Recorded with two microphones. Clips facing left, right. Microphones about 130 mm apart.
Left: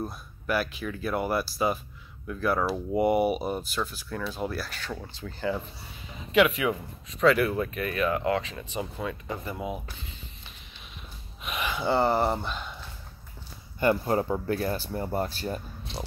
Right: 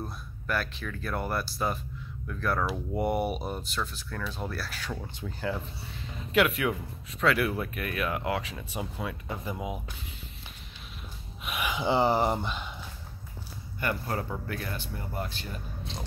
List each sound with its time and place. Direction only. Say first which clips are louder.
0.0 s speech: left 4 dB; 10° left (ahead or behind)
11.4 s speech: left 1 dB; 10° right (ahead or behind)
13.7 s speech: left 8 dB; 25° left (ahead or behind)